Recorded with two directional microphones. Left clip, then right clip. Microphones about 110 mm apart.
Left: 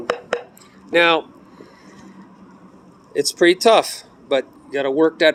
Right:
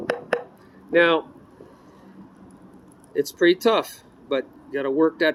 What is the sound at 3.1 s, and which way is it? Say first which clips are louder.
Speech: left 4 dB; 40° right (ahead or behind).